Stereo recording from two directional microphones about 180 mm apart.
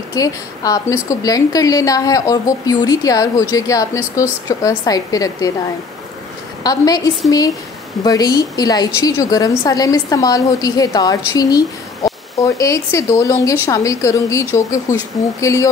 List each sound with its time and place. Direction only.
0.1 s a woman's voice: 20° left (ahead or behind)
6.6 s a woman's voice: 20° left (ahead or behind)